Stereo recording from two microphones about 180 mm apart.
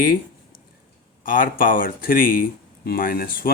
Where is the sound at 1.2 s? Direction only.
50° left (ahead or behind).